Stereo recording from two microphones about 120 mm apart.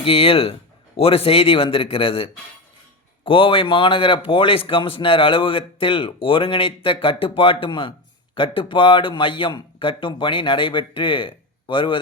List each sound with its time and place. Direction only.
0.0 s a man's voice: 50° left (ahead or behind)